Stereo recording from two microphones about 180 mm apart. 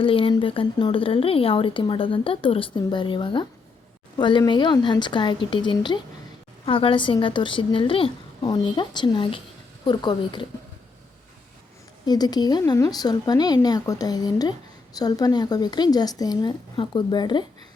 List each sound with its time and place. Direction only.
0.0 s speech: 30° left (ahead or behind)
12.0 s speech: 20° left (ahead or behind)